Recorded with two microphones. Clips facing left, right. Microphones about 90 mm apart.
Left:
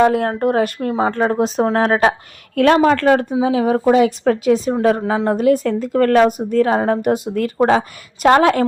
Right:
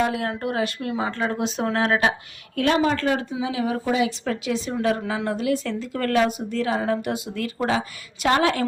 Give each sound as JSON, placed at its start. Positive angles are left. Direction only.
{"t": 0.0, "sound": "speech", "side_deg": 45}
{"t": 2.7, "sound": "speech", "side_deg": 60}
{"t": 3.3, "sound": "a woman's voice", "side_deg": 40}